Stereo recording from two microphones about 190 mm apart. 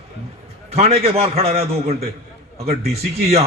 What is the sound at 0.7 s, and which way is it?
A man's voice, 30° right (ahead or behind).